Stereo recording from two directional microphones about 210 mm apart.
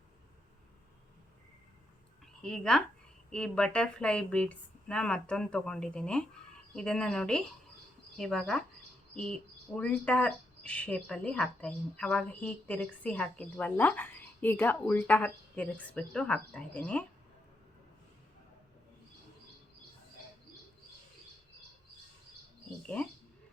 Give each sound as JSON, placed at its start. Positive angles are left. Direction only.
{"t": 2.2, "sound": "a woman's voice", "side_deg": 5}